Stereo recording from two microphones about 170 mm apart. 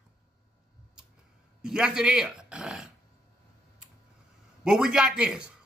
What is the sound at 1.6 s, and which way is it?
Speech, 5° right (ahead or behind).